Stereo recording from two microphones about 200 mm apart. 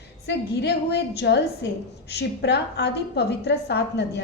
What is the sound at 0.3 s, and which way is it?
A woman's voice, 55° left (ahead or behind).